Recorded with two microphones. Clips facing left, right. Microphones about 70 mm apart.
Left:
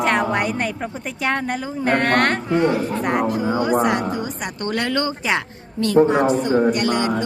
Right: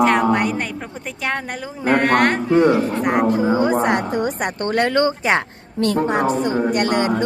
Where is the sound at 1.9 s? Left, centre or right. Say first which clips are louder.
Right 2 dB; centre.